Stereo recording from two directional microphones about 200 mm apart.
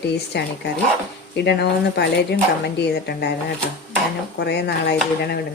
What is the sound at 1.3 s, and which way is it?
A woman's voice, 55° left (ahead or behind).